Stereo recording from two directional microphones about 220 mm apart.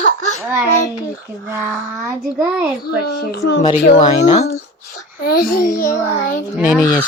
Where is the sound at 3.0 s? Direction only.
45° left (ahead or behind).